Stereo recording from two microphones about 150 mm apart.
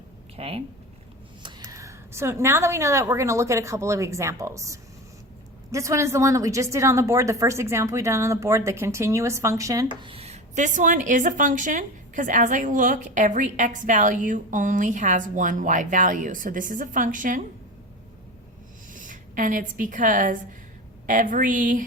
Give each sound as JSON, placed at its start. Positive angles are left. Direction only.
{"t": 0.3, "sound": "speech", "side_deg": -40}
{"t": 1.4, "sound": "a woman's voice", "side_deg": -30}
{"t": 10.0, "sound": "a woman's voice", "side_deg": -40}
{"t": 18.9, "sound": "a woman's voice", "side_deg": -60}